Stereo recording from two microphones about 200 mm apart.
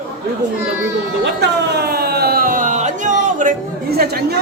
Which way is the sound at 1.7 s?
50° right (ahead or behind).